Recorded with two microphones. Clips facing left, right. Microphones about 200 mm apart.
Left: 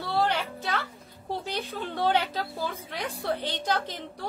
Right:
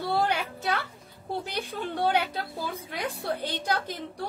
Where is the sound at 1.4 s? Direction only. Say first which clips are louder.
Even; 15° right (ahead or behind).